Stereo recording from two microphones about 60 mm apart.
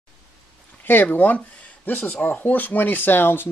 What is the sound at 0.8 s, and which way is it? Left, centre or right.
Speech, left.